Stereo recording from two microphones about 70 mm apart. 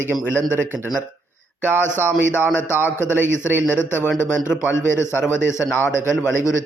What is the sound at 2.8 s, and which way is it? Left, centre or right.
A man's voice, left.